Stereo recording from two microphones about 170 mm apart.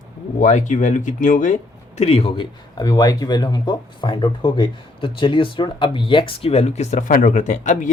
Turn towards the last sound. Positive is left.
turn(degrees=45)  # may be behind; listen again after turning